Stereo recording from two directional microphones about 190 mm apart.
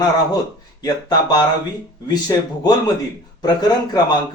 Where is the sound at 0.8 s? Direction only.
20° left (ahead or behind).